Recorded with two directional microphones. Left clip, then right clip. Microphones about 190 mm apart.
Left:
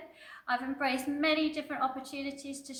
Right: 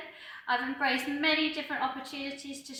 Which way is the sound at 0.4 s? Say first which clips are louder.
Right 3 dB; 35° left (ahead or behind).